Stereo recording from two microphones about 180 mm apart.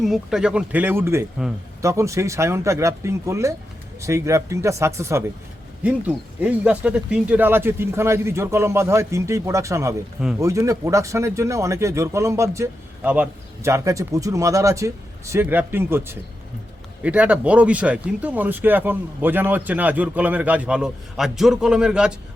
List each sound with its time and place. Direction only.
0.0 s speech: centre (ahead or behind)